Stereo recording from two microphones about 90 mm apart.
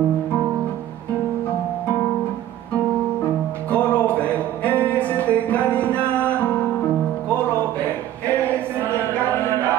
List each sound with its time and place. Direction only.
3.7 s music: 15° left (ahead or behind)